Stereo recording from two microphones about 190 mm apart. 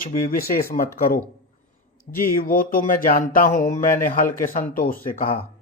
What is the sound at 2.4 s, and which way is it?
Speech, 50° left (ahead or behind).